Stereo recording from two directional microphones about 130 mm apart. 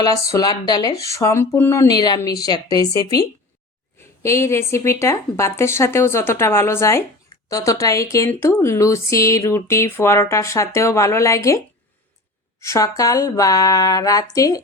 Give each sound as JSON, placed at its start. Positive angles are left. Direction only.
{"t": 0.0, "sound": "speech", "side_deg": 30}
{"t": 4.2, "sound": "speech", "side_deg": 20}